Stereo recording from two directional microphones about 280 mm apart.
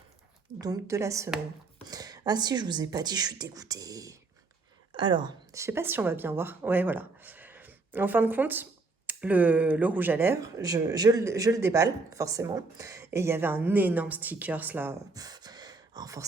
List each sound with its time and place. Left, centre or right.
0.6 s a woman's voice: centre